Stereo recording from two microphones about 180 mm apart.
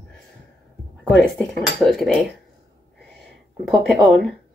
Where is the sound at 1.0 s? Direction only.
5° left (ahead or behind).